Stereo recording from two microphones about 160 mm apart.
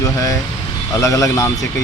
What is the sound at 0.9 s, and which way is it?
Speech, 20° left (ahead or behind).